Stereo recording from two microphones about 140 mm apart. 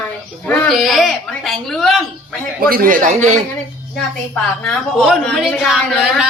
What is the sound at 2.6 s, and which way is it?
Speech, 90° right.